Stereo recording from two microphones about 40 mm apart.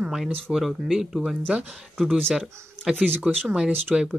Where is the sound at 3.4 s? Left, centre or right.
Centre.